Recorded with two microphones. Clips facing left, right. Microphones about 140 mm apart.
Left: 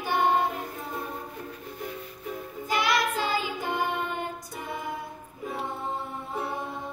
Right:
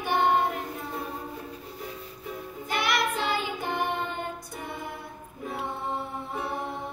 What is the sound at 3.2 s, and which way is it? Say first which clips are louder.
Child singing: even; 25° right (ahead or behind).